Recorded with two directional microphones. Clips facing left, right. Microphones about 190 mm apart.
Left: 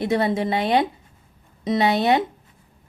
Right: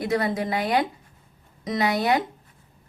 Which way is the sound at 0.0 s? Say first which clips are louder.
Left 3 dB; 25° left (ahead or behind).